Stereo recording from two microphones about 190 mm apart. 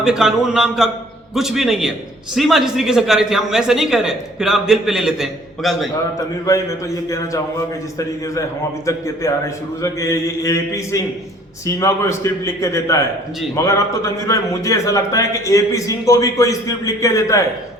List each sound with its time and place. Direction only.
0.0 s speech: 5° right (ahead or behind)
6.1 s a man's voice: 20° left (ahead or behind)
8.9 s a man's voice: 15° left (ahead or behind)